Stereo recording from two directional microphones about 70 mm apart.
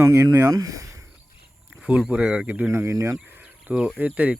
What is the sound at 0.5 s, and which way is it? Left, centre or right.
Speech, right.